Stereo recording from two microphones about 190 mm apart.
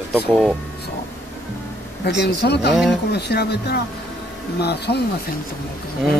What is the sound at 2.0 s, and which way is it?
Speech, 60° left (ahead or behind).